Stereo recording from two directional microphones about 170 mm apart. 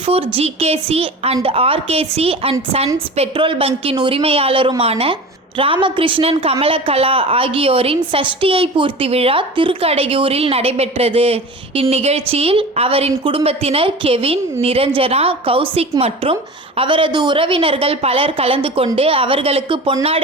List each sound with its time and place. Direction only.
0.0 s a woman's voice: 35° right (ahead or behind)